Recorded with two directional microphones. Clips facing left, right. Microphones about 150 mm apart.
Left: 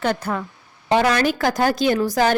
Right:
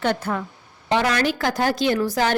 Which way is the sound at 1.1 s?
40° left (ahead or behind).